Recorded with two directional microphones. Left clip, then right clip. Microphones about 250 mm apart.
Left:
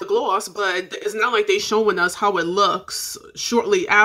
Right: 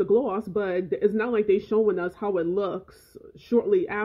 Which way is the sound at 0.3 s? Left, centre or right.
Centre.